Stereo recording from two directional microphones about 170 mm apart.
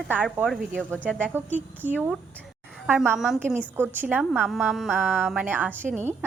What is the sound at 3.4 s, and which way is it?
A woman's voice, 15° right (ahead or behind).